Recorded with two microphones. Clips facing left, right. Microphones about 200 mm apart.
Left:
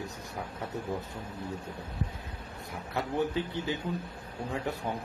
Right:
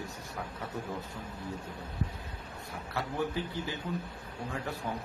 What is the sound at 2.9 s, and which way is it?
Speech, 20° left (ahead or behind).